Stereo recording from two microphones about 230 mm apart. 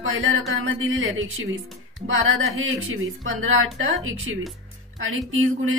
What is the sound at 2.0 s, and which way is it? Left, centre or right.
Speech, right.